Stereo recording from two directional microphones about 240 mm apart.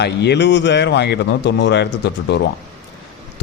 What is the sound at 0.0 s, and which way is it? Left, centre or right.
A man's voice, left.